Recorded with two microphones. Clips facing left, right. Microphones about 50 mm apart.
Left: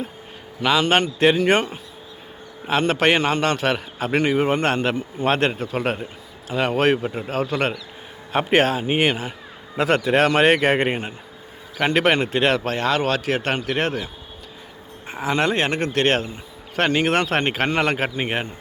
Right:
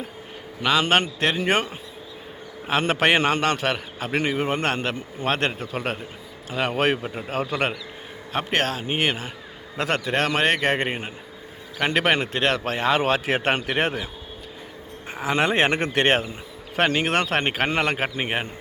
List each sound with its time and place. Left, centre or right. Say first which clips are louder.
0.6 s a man's voice: left 2 dB; centre
8.3 s a man's voice: left 6 dB; centre
12.7 s speech: even; centre
15.0 s a sound: left 2 dB; centre
15.3 s a man's voice: even; centre